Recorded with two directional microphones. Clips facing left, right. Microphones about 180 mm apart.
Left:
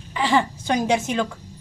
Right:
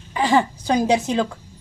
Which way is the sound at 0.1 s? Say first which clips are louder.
Right 2 dB; 40° right (ahead or behind).